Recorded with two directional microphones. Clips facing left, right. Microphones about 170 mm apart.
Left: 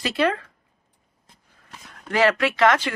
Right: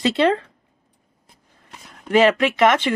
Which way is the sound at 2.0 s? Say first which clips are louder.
Right 4 dB; 20° right (ahead or behind).